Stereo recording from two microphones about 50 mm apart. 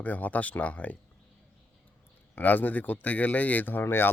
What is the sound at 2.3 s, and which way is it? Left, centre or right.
Speech, left.